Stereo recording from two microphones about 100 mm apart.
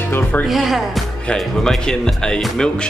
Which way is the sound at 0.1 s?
15° left (ahead or behind).